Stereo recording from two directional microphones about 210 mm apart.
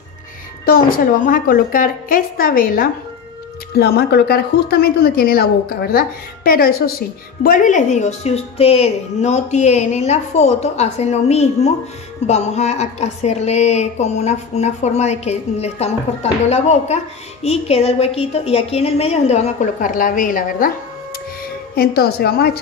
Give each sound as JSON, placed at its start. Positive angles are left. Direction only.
{"t": 0.7, "sound": "a woman's voice", "side_deg": 45}
{"t": 21.7, "sound": "a woman's voice", "side_deg": 45}